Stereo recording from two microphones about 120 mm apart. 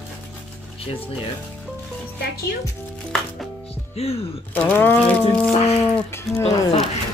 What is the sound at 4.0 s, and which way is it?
Speech, 60° left (ahead or behind).